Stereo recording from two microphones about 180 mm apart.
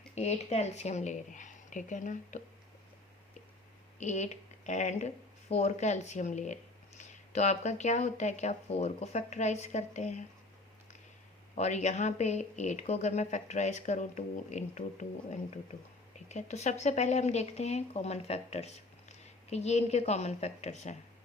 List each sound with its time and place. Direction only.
0.1 s speech: 40° left (ahead or behind)
4.0 s speech: 40° left (ahead or behind)
11.5 s speech: 40° left (ahead or behind)